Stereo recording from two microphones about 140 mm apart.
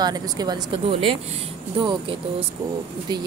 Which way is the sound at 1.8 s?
35° right (ahead or behind).